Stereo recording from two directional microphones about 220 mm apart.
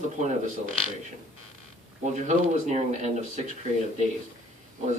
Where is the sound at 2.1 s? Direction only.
35° right (ahead or behind).